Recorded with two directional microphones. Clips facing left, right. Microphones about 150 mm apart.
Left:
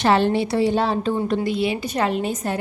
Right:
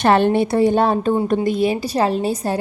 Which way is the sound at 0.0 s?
55° right (ahead or behind).